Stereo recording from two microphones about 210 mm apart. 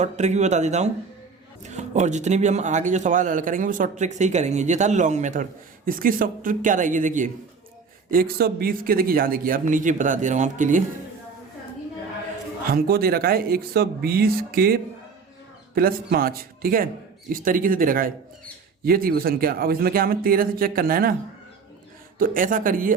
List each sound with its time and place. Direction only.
0.0 s speech: 35° right (ahead or behind)
12.7 s speech: 45° right (ahead or behind)
22.2 s speech: 40° right (ahead or behind)